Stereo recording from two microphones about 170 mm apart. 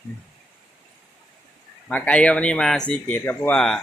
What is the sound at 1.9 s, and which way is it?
Speech, 5° left (ahead or behind).